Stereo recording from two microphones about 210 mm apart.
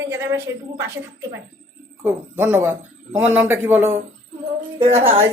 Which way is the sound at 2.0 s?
10° right (ahead or behind).